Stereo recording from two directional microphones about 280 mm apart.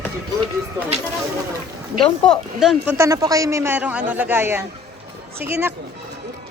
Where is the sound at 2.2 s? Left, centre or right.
Centre.